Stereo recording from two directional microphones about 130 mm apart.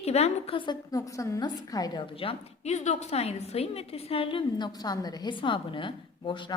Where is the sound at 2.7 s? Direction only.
60° left (ahead or behind).